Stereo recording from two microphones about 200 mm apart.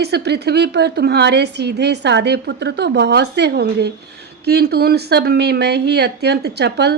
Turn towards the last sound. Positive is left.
turn(degrees=-55)  # may be behind; listen again after turning